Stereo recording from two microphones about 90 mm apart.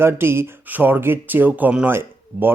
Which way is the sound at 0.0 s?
25° right (ahead or behind).